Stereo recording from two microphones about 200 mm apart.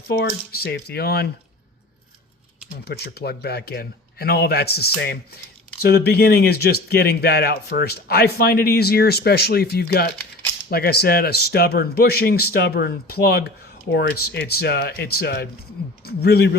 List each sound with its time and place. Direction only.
0.1 s a man's voice: 55° left (ahead or behind)
2.8 s a man's voice: 55° left (ahead or behind)